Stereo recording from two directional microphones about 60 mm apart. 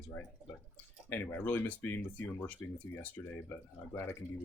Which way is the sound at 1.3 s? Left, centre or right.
Left.